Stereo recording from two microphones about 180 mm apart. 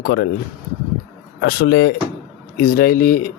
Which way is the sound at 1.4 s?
65° left (ahead or behind).